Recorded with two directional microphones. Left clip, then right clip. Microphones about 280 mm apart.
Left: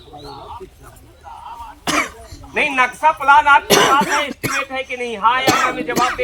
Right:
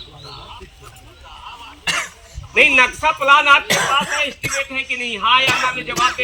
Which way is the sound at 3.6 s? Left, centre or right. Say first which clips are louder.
Left 4 dB; left.